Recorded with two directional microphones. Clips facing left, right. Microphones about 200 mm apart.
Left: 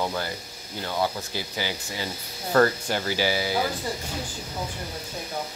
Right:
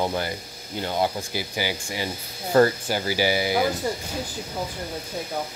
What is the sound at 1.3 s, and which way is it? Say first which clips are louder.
Speech: right 3 dB; 10° right (ahead or behind).